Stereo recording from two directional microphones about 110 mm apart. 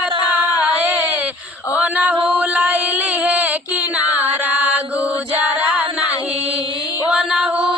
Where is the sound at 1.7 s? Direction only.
15° right (ahead or behind).